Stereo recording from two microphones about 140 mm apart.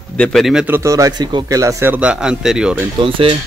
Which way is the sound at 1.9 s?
5° right (ahead or behind).